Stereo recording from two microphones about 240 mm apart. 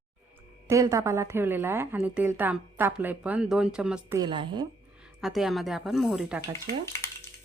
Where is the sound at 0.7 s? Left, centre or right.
Centre.